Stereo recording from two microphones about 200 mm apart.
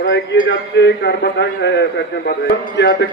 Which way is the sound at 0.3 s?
60° left (ahead or behind).